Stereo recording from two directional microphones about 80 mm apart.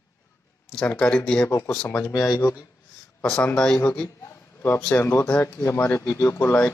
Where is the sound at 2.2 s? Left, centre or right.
Left.